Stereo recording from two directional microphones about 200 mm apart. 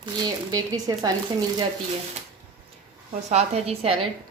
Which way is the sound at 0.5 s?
20° right (ahead or behind).